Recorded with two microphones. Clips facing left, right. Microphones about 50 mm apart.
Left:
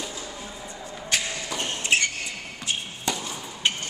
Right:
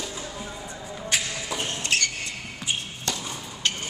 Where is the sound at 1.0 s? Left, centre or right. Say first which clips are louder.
Even; centre.